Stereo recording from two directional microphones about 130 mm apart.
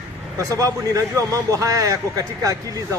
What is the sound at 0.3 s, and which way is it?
A man's voice, 25° right (ahead or behind).